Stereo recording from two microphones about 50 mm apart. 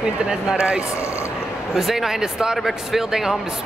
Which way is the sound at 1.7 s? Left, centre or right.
Centre.